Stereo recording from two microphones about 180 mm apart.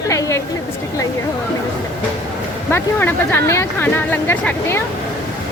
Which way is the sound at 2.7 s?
10° left (ahead or behind).